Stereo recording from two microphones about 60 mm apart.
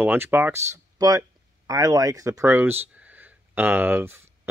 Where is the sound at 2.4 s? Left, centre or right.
Right.